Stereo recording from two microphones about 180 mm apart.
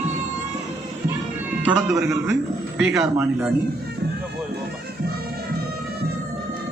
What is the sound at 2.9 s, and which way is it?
Speech, 15° right (ahead or behind).